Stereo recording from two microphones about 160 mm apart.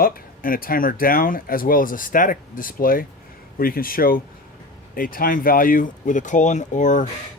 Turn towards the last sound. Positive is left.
turn(degrees=50)  # may be behind; listen again after turning